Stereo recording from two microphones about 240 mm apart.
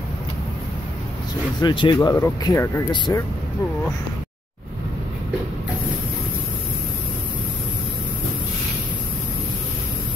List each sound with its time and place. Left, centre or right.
1.6 s speech: centre